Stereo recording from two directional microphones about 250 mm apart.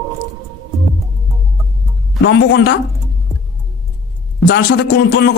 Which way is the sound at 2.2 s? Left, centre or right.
Left.